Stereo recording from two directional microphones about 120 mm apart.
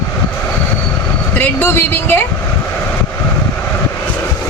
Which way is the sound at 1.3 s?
15° left (ahead or behind).